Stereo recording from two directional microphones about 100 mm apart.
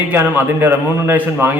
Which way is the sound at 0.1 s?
20° right (ahead or behind).